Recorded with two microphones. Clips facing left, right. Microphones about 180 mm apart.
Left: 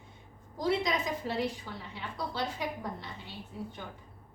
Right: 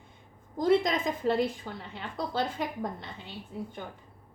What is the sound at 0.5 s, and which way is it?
A woman's voice, 50° right (ahead or behind).